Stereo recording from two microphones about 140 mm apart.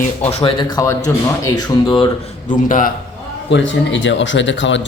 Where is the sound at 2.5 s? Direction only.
70° left (ahead or behind).